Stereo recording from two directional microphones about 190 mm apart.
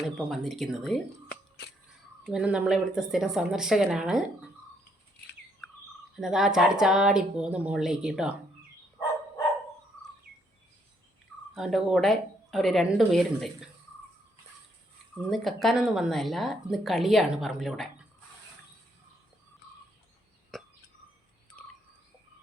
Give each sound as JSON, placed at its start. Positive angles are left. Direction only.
{"t": 0.3, "sound": "speech", "side_deg": 0}
{"t": 1.3, "sound": "a sound", "side_deg": 60}
{"t": 2.2, "sound": "speech", "side_deg": -5}
{"t": 5.6, "sound": "bird", "side_deg": 5}
{"t": 6.1, "sound": "speech", "side_deg": 0}
{"t": 11.5, "sound": "speech", "side_deg": 0}
{"t": 15.3, "sound": "speech", "side_deg": 0}
{"t": 20.5, "sound": "a sound", "side_deg": 0}